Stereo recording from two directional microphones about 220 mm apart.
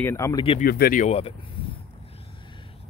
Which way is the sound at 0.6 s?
40° left (ahead or behind).